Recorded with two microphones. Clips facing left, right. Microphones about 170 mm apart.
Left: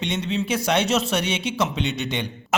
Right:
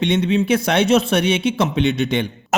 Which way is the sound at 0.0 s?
60° right (ahead or behind).